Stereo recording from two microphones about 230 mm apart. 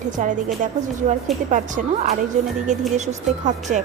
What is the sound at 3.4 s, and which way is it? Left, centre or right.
Speech, right.